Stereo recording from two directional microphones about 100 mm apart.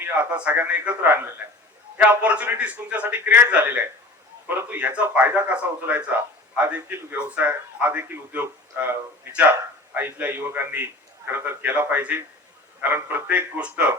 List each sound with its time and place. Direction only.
0.0 s a man's voice: 15° right (ahead or behind)